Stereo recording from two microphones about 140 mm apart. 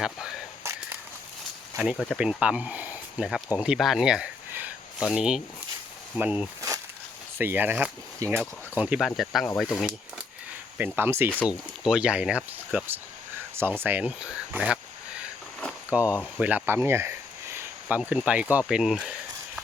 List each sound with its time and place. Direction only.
1.8 s speech: 5° right (ahead or behind); by 8.4 s 20° right (ahead or behind)
8.7 s speech: 10° right (ahead or behind)
9.0 s speech: centre (ahead or behind)
10.8 s speech: 15° right (ahead or behind)
15.9 s speech: 10° right (ahead or behind)